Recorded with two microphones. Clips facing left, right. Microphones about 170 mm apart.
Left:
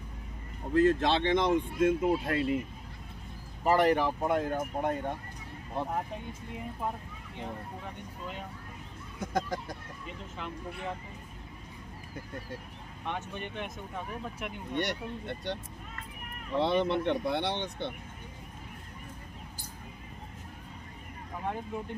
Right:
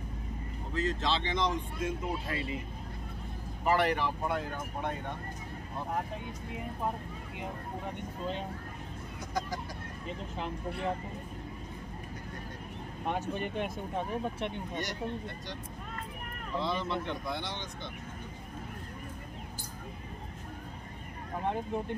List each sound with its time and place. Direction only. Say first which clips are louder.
0.7 s speech: left 7 dB; 55° left (ahead or behind)
3.6 s speech: left 4 dB; 40° left (ahead or behind)
9.2 s speech: left 4 dB; 55° left (ahead or behind)
10.0 s speech: right 4 dB; 35° right (ahead or behind)
13.0 s speech: right 4 dB; 40° right (ahead or behind)
14.8 s speech: left 4 dB; 65° left (ahead or behind)